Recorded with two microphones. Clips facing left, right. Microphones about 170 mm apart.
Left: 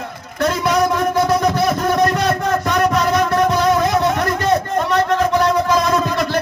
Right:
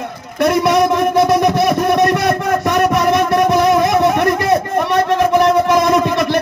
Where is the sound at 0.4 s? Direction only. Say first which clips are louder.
Right 4 dB; 20° right (ahead or behind).